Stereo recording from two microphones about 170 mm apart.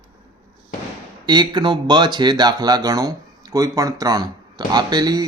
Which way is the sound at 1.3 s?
25° right (ahead or behind).